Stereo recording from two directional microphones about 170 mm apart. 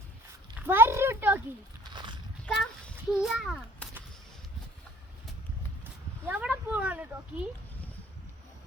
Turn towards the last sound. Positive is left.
turn(degrees=-10)  # may be behind; listen again after turning